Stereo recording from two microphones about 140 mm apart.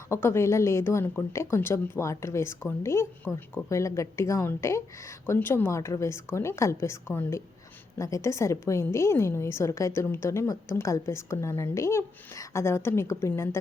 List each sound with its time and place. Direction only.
0.1 s speech: 20° left (ahead or behind)